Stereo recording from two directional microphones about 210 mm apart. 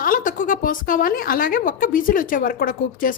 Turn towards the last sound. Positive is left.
turn(degrees=40)  # may be behind; listen again after turning